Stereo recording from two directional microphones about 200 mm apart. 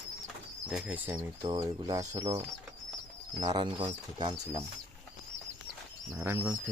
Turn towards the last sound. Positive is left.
turn(degrees=-10)  # may be behind; listen again after turning